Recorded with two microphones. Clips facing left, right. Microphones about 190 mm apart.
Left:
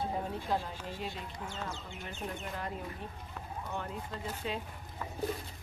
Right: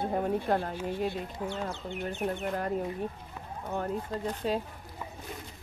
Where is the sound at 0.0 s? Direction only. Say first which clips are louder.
Right 7 dB; 55° right (ahead or behind).